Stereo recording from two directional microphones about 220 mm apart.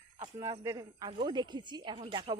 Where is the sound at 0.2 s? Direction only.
20° right (ahead or behind).